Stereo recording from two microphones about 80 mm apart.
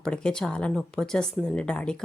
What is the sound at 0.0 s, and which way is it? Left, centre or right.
Speech, centre.